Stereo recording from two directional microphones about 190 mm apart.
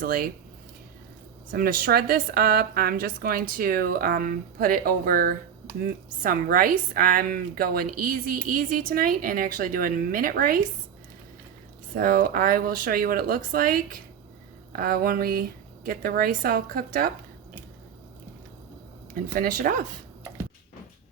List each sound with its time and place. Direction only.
0.0 s a woman's voice: 50° right (ahead or behind)
1.5 s a woman's voice: 50° right (ahead or behind)
11.9 s a woman's voice: 50° right (ahead or behind)
19.1 s a woman's voice: 50° right (ahead or behind)